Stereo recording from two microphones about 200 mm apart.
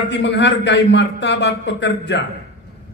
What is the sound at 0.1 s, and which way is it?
A man's voice, 60° left (ahead or behind).